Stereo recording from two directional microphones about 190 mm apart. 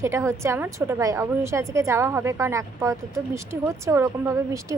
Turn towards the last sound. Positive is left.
turn(degrees=-15)  # may be behind; listen again after turning